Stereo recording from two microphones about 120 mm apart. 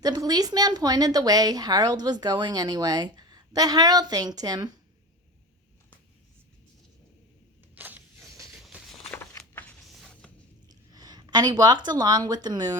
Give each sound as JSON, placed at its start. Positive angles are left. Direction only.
{"t": 0.0, "sound": "speech", "side_deg": -30}
{"t": 7.8, "sound": "a sound", "side_deg": -15}
{"t": 8.6, "sound": "walk", "side_deg": 0}
{"t": 9.9, "sound": "music", "side_deg": 0}
{"t": 10.7, "sound": "speech", "side_deg": -35}